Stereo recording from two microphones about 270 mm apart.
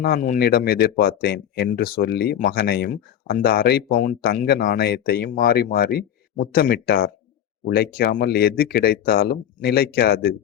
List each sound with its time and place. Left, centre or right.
0.0 s speech: left